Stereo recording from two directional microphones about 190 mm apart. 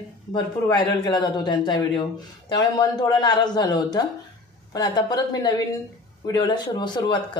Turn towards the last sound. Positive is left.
turn(degrees=25)  # may be behind; listen again after turning